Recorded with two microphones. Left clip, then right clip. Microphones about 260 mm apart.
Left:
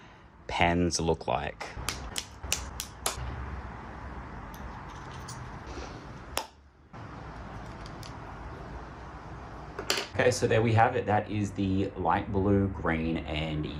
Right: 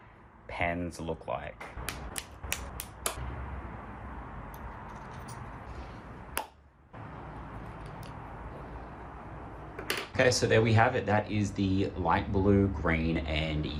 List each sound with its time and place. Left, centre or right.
0.5 s speech: left
1.9 s a sound: centre
10.2 s speech: centre